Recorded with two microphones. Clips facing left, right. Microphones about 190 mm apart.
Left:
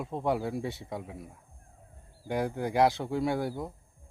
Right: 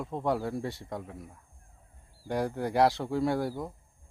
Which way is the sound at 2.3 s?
Centre (ahead or behind).